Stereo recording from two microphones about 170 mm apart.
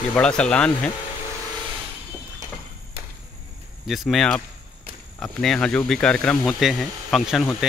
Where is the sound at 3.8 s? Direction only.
Centre (ahead or behind).